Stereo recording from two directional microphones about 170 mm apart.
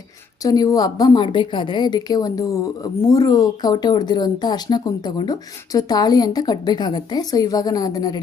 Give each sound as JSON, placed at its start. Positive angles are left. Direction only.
{"t": 0.4, "sound": "a woman's voice", "side_deg": 20}